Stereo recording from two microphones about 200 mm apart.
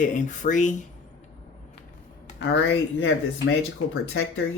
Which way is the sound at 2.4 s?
70° left (ahead or behind).